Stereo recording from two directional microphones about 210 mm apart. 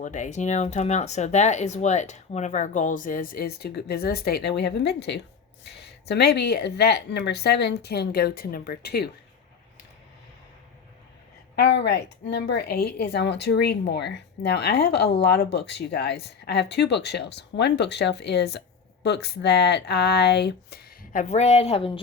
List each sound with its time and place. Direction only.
0.0 s speech: 35° left (ahead or behind)
11.5 s speech: 55° left (ahead or behind); by 22.0 s 25° left (ahead or behind)